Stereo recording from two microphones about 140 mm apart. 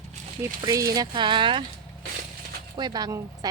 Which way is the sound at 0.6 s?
25° right (ahead or behind).